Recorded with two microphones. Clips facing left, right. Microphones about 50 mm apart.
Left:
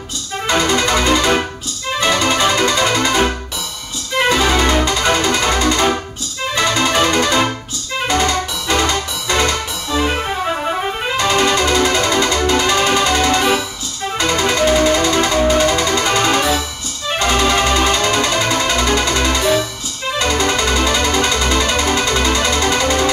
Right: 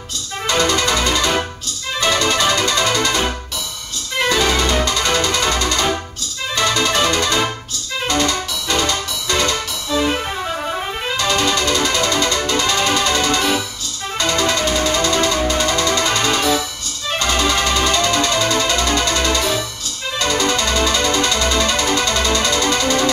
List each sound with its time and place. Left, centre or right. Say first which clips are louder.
0.6 s music: left 1 dB; centre
4.3 s music: left 2 dB; centre
10.4 s music: left 4 dB; left